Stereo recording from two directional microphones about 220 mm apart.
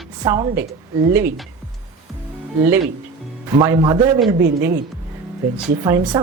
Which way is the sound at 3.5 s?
15° right (ahead or behind).